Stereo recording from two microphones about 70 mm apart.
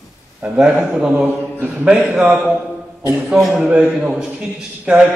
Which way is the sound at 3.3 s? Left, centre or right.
Centre.